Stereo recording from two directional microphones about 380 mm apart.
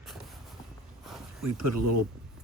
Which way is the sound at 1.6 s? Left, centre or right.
Right.